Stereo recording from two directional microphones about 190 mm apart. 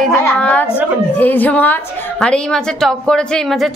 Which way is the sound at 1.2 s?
10° left (ahead or behind).